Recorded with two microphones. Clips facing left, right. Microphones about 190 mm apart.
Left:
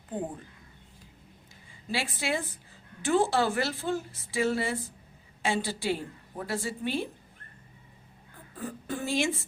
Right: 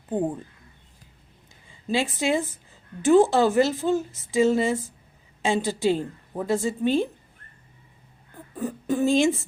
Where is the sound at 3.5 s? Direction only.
20° right (ahead or behind).